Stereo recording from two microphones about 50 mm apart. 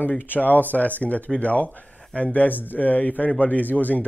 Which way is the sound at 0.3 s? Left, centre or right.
Left.